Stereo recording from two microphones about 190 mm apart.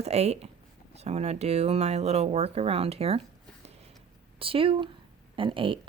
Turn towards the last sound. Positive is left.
turn(degrees=-25)  # may be behind; listen again after turning